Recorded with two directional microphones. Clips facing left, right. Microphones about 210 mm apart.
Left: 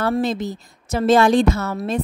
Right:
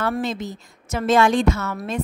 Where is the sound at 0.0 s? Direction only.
35° left (ahead or behind).